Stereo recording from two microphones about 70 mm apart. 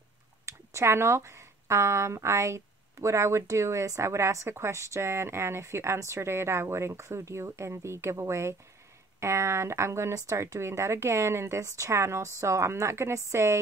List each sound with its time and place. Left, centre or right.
0.5 s speech: right